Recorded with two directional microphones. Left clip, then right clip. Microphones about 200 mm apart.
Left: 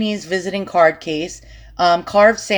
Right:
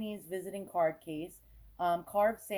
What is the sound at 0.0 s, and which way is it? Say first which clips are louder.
Speech: left 19 dB; 20° left (ahead or behind).